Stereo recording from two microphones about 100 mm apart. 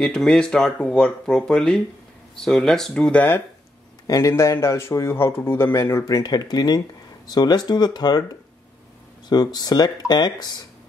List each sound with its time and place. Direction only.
0.0 s speech: 5° left (ahead or behind)
4.1 s speech: 30° left (ahead or behind)